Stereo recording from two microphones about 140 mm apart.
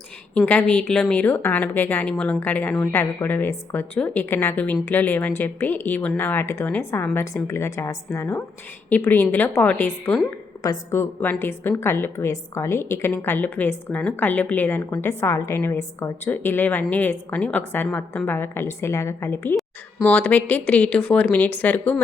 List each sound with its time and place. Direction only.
0.3 s a woman's voice: 10° left (ahead or behind)